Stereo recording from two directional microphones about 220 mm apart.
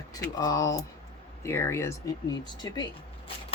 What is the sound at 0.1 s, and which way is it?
Speech, 15° left (ahead or behind).